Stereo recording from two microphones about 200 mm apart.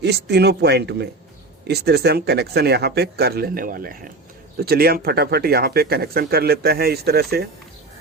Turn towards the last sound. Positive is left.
turn(degrees=-50)  # may be behind; listen again after turning